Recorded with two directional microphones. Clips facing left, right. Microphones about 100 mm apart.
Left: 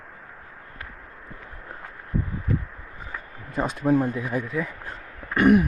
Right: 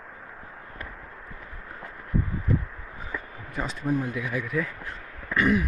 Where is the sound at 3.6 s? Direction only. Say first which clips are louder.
Left 6 dB; 50° left (ahead or behind).